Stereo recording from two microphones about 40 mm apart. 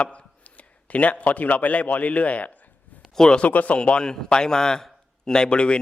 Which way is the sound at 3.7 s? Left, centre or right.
Left.